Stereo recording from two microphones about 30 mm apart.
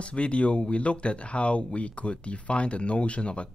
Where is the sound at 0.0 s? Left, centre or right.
Left.